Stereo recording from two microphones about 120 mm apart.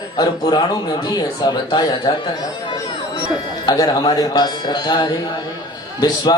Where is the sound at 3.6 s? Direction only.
35° left (ahead or behind).